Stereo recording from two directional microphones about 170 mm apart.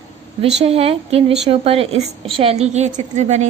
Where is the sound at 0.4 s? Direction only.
35° right (ahead or behind).